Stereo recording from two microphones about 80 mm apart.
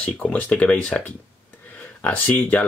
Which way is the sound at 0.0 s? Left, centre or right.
Centre.